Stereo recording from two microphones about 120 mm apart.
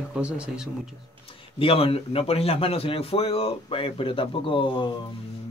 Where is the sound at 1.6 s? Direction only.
50° left (ahead or behind).